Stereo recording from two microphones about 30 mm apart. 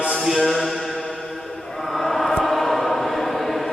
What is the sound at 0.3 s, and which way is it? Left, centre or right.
Mantra, centre.